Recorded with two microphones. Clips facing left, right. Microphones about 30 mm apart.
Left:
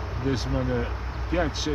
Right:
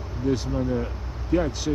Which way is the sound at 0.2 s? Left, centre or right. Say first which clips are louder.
Right 3 dB; left.